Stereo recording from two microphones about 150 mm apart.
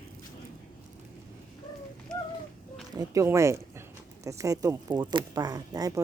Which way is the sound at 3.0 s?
20° right (ahead or behind).